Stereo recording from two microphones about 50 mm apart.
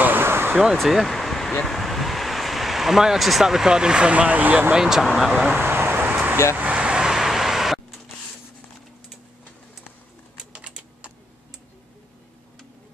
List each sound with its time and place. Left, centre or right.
0.0 s a sound: right
0.7 s a sound: centre
1.7 s speech: centre; by 4.7 s right
4.7 s speech: centre
5.6 s vehicle: right
6.7 s vehicle: centre
10.5 s typing: right